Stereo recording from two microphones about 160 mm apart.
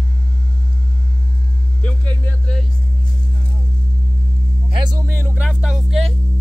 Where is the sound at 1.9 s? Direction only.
10° left (ahead or behind).